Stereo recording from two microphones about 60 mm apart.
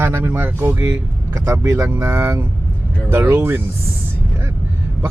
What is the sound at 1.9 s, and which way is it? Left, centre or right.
Speech, right.